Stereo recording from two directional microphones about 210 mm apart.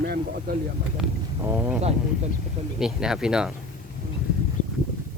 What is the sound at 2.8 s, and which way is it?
Speech, centre (ahead or behind).